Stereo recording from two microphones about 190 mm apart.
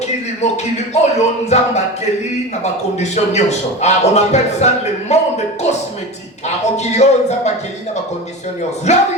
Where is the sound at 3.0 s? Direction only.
35° left (ahead or behind).